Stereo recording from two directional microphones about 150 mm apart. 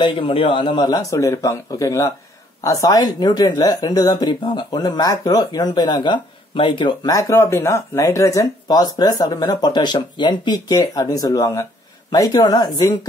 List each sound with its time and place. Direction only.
0.0 s speech: 35° left (ahead or behind)